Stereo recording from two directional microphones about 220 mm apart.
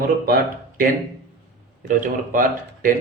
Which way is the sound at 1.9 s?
35° right (ahead or behind).